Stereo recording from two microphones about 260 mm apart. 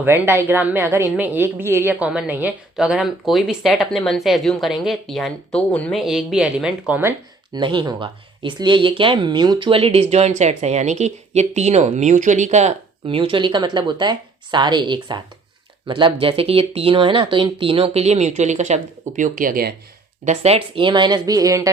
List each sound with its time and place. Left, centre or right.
0.0 s a woman's voice: centre
7.5 s speech: centre